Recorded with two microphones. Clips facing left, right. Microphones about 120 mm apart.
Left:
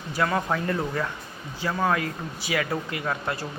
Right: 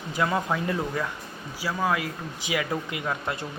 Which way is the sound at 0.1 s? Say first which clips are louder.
Left 1 dB; 15° right (ahead or behind).